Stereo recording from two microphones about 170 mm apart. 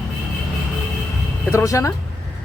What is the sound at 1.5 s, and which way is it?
Speech, 20° left (ahead or behind).